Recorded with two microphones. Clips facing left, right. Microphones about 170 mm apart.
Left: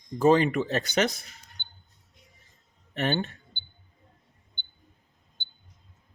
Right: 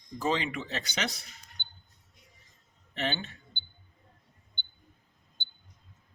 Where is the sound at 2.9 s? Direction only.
45° left (ahead or behind).